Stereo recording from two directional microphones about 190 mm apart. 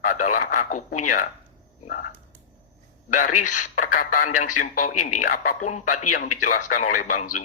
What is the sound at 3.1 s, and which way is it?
A man's voice, 45° left (ahead or behind).